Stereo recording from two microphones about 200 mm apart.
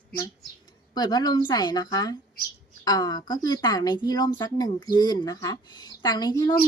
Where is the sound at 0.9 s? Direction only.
20° left (ahead or behind).